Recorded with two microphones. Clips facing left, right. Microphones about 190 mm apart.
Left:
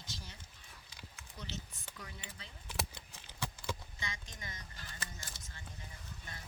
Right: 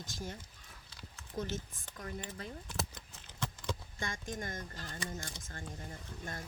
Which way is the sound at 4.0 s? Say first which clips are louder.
Right 8 dB; 50° right (ahead or behind).